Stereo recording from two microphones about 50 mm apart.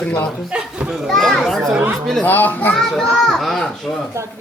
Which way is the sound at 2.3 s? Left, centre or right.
Left.